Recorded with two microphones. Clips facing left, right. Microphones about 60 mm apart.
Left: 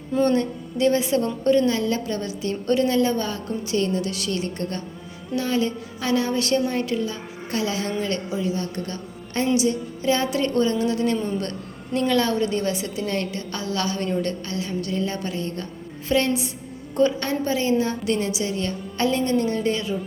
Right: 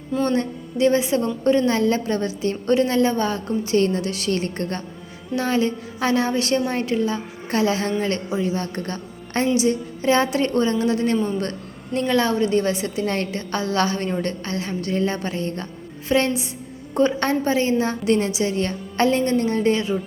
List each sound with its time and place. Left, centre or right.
0.1 s music: centre
0.3 s a woman's voice: right